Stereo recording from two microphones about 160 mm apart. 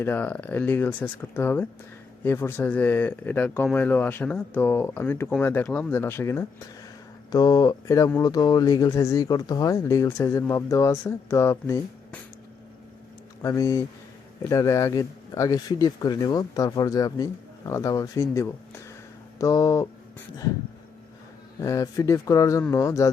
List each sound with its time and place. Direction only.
0.0 s speech: 10° left (ahead or behind)
13.4 s speech: 20° left (ahead or behind)
21.6 s speech: 20° left (ahead or behind)